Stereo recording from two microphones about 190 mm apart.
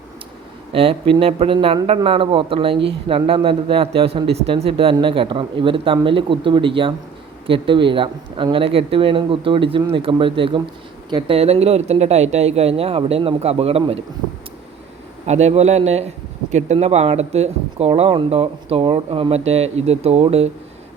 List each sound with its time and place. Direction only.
0.7 s a man's voice: 30° right (ahead or behind)
15.3 s speech: 35° right (ahead or behind)